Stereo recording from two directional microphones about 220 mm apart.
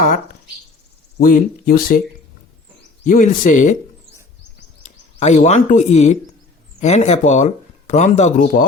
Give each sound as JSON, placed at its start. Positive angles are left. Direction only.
{"t": 1.3, "sound": "speech", "side_deg": 40}
{"t": 3.0, "sound": "speech", "side_deg": 35}
{"t": 5.2, "sound": "speech", "side_deg": 30}